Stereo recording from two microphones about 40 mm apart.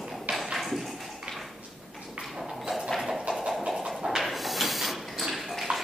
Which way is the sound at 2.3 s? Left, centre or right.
Centre.